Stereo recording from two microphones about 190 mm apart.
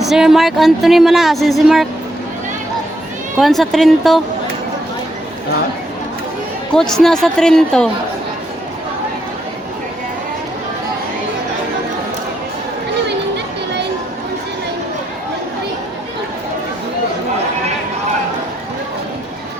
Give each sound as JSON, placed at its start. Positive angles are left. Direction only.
{"t": 0.0, "sound": "speech", "side_deg": 0}
{"t": 3.3, "sound": "speech", "side_deg": 0}
{"t": 6.7, "sound": "speech", "side_deg": 0}
{"t": 13.1, "sound": "chatter", "side_deg": -65}